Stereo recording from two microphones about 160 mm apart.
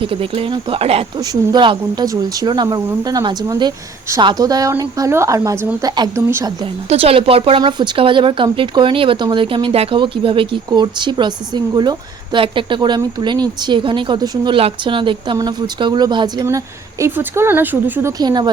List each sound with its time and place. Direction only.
0.0 s speech: 35° right (ahead or behind)
1.2 s speech: 25° right (ahead or behind)
6.8 s speech: 35° right (ahead or behind); by 18.1 s 10° right (ahead or behind)
18.2 s speech: 25° right (ahead or behind)